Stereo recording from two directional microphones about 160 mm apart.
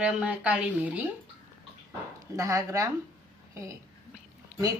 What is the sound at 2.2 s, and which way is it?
A woman's voice, 20° right (ahead or behind).